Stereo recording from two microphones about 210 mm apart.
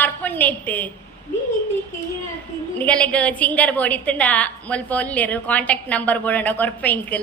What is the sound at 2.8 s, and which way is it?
A woman's voice, 5° left (ahead or behind).